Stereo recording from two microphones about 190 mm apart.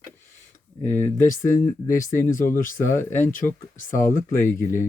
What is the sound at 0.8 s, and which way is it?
Speech, 10° left (ahead or behind).